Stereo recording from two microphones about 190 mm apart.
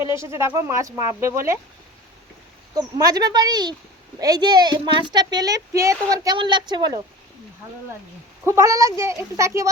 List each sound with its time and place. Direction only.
0.2 s speech: 15° right (ahead or behind)
2.7 s speech: 20° right (ahead or behind)
8.4 s speech: 15° right (ahead or behind)